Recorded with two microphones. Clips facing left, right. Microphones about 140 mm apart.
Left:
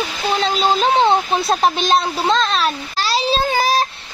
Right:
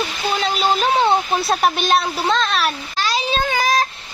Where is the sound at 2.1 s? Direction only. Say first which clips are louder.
Left 2 dB; 25° left (ahead or behind).